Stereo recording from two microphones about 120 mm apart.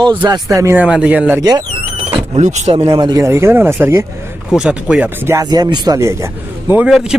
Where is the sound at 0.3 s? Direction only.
25° right (ahead or behind).